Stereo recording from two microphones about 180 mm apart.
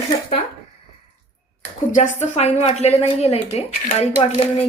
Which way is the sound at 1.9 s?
45° left (ahead or behind).